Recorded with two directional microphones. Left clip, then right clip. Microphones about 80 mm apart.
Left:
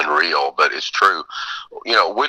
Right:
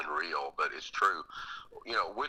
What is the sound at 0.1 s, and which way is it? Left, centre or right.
Speech, left.